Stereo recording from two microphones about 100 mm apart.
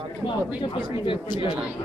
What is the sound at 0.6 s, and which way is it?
Speech, 55° left (ahead or behind).